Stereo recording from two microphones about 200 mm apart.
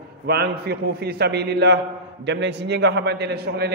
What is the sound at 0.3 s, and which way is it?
A man's voice, 55° right (ahead or behind).